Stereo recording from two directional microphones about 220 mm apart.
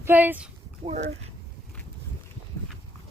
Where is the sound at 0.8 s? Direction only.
25° right (ahead or behind).